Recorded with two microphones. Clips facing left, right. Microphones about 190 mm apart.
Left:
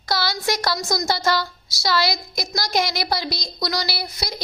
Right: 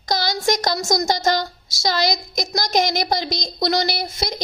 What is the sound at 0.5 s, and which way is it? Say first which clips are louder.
Speech: right 3 dB; 20° right (ahead or behind).